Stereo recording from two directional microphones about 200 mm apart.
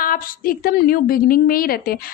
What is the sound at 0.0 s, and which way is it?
A woman's voice, 45° left (ahead or behind).